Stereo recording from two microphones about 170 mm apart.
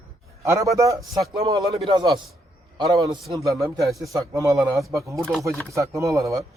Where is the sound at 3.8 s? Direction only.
Centre (ahead or behind).